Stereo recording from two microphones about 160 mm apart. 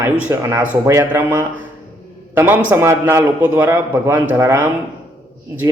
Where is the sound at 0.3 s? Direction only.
15° right (ahead or behind).